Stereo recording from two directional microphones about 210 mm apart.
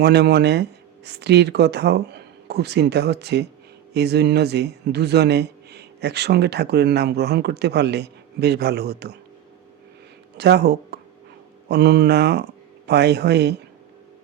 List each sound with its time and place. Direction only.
0.0 s speech: 50° right (ahead or behind)
10.3 s speech: 50° right (ahead or behind)